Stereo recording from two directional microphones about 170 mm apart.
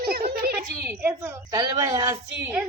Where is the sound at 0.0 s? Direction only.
65° right (ahead or behind).